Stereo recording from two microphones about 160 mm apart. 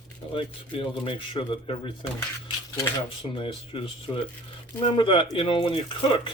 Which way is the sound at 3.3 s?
35° left (ahead or behind).